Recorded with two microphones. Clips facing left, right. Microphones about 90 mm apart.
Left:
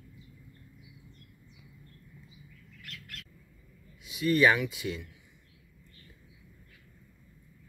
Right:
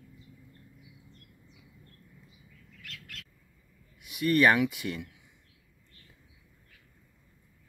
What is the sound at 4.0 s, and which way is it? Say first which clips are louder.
Speech: right 1 dB; 60° right (ahead or behind).